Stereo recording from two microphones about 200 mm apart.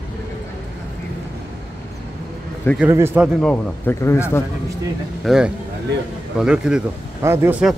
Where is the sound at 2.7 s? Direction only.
10° right (ahead or behind).